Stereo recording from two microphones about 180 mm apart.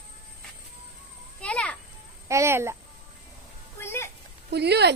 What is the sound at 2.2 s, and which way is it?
Speech, 15° right (ahead or behind).